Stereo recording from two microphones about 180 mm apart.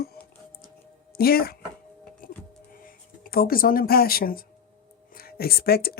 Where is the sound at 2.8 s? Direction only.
50° left (ahead or behind).